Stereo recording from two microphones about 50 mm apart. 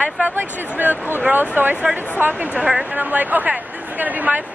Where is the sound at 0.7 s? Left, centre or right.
Right.